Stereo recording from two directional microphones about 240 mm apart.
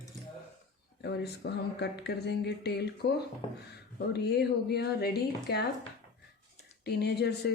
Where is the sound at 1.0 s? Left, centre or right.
Left.